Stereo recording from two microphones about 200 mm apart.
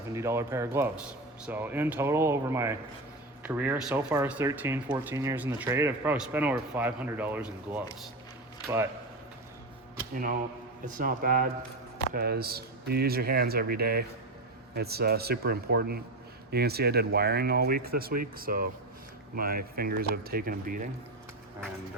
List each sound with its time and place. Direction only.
0.1 s speech: 15° right (ahead or behind)
10.9 s speech: 45° right (ahead or behind)